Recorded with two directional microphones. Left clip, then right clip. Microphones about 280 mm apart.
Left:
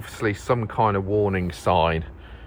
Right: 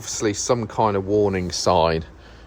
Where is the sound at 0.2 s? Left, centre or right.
Right.